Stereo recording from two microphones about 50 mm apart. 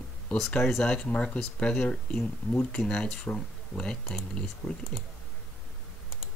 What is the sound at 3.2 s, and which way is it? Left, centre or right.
Speech, left.